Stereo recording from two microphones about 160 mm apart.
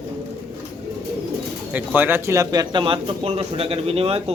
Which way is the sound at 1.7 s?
10° right (ahead or behind).